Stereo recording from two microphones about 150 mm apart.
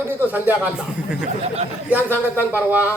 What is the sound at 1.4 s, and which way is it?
Speech, 45° right (ahead or behind).